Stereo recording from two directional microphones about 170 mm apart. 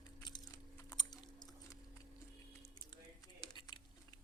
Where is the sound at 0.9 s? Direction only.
25° left (ahead or behind).